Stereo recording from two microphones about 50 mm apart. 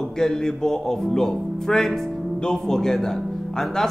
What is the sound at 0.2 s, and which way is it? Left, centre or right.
Speech, centre.